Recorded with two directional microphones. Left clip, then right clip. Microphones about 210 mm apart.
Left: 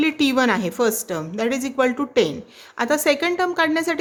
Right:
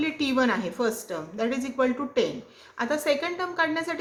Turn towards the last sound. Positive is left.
turn(degrees=55)  # may be behind; listen again after turning